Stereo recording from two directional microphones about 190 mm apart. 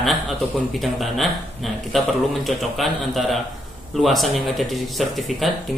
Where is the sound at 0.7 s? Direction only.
Centre (ahead or behind).